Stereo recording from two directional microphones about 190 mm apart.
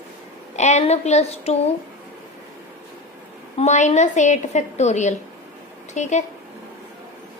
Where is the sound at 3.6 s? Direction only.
35° left (ahead or behind).